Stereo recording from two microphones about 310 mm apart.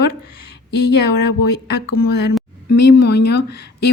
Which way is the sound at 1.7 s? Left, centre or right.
Left.